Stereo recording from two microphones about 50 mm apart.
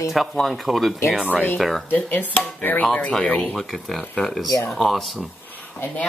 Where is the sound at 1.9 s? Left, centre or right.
Left.